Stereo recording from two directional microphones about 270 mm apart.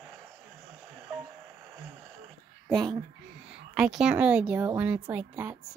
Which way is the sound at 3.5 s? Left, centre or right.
Centre.